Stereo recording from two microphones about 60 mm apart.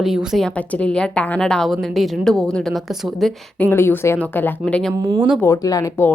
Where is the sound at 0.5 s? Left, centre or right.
Left.